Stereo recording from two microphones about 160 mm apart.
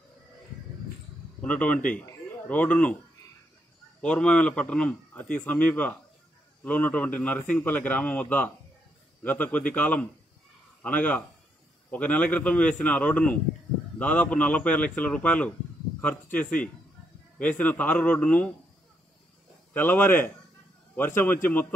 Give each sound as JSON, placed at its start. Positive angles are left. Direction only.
{"t": 1.4, "sound": "a man's voice", "side_deg": 10}
{"t": 4.0, "sound": "a man's voice", "side_deg": 10}
{"t": 19.7, "sound": "a man's voice", "side_deg": 10}